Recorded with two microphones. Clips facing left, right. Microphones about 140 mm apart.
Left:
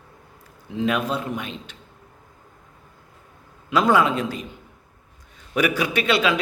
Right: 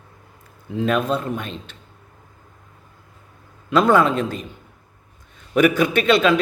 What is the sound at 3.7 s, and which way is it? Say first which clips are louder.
Speech: right 3 dB; 10° left (ahead or behind).